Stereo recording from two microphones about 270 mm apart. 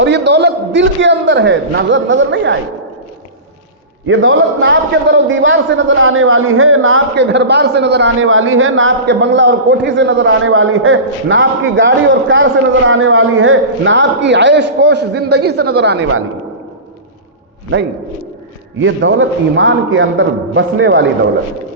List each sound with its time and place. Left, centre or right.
0.0 s a man's voice: right
4.0 s a man's voice: right
18.8 s a man's voice: right